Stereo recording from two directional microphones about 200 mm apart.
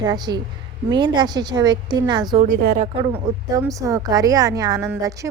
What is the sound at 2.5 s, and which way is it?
Speech, 45° right (ahead or behind).